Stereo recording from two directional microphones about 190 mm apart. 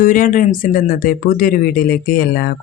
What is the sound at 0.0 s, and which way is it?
Speech, 45° left (ahead or behind).